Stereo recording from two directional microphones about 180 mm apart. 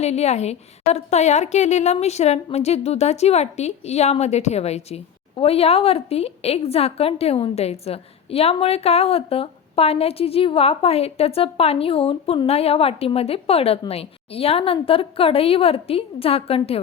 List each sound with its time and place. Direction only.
0.0 s a woman's voice: 35° left (ahead or behind)